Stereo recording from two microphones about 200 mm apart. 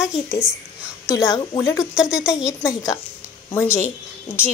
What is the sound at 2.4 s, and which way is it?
A woman's voice, 15° left (ahead or behind).